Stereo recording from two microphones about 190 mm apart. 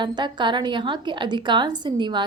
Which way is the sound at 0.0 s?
25° right (ahead or behind).